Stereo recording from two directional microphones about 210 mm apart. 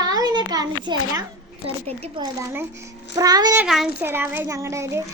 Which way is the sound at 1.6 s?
30° right (ahead or behind).